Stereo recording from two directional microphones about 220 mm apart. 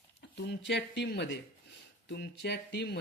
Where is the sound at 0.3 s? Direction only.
50° left (ahead or behind).